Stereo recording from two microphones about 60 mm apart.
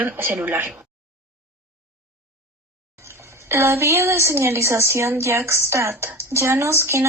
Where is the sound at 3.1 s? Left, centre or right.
Right.